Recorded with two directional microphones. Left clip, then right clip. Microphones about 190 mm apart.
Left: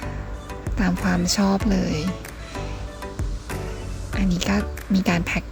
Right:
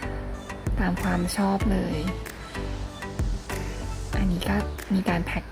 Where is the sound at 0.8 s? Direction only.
35° left (ahead or behind).